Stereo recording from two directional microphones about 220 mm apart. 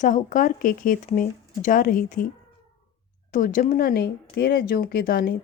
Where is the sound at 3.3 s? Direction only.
35° left (ahead or behind).